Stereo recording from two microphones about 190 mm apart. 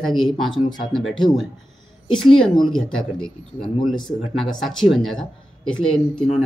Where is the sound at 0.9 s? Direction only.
Centre (ahead or behind).